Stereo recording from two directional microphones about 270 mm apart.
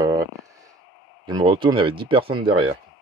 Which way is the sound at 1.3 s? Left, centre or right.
Centre.